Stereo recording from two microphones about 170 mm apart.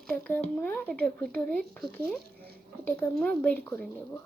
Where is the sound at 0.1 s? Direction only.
10° left (ahead or behind).